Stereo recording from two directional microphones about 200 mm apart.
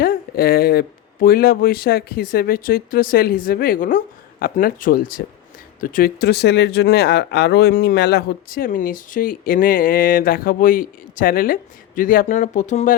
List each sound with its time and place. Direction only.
0.0 s speech: 50° left (ahead or behind)